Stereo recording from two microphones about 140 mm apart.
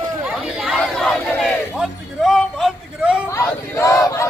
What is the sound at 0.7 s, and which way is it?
Crowd, centre (ahead or behind).